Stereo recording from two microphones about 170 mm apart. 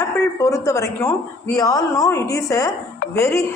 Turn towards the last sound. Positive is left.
turn(degrees=15)  # may be behind; listen again after turning